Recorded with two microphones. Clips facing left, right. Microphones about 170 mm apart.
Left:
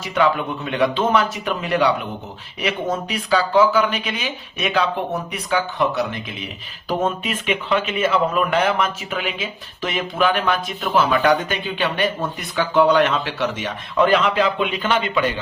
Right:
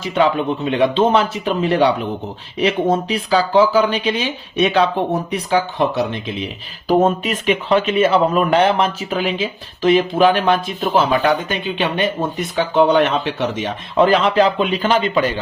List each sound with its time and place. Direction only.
0.0 s speech: 25° right (ahead or behind)
6.8 s speech: 40° right (ahead or behind)